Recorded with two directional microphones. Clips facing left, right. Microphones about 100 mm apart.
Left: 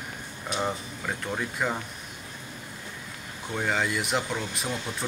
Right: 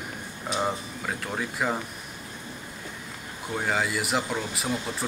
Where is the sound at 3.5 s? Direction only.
5° right (ahead or behind).